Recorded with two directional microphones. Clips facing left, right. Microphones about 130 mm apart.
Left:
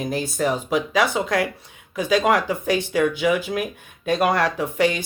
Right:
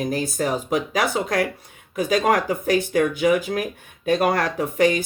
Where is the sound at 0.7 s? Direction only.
45° right (ahead or behind).